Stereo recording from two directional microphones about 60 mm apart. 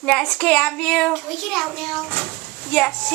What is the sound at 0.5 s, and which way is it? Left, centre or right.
Speech, centre.